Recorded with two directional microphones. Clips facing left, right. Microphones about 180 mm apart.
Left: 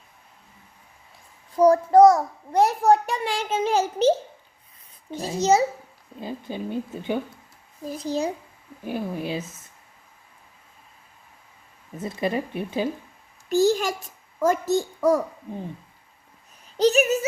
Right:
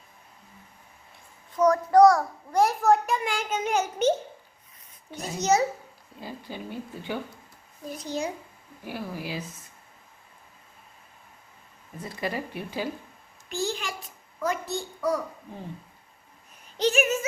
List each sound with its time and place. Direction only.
1.5 s a child's voice: 30° left (ahead or behind)
5.1 s a child's voice: 30° left (ahead or behind)
6.1 s speech: 20° left (ahead or behind)
7.9 s a child's voice: 35° left (ahead or behind)
8.8 s speech: 20° left (ahead or behind)
11.9 s speech: 20° left (ahead or behind)
13.5 s a child's voice: 40° left (ahead or behind)
16.7 s a child's voice: 35° left (ahead or behind)